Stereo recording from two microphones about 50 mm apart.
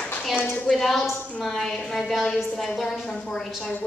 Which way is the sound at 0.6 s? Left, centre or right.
Centre.